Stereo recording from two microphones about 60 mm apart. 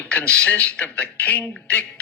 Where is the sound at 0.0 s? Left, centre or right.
Left.